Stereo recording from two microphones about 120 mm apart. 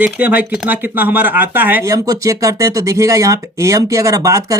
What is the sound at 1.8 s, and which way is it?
Speech, 30° right (ahead or behind).